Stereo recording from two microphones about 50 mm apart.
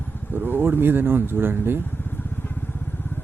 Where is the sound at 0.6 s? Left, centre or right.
Right.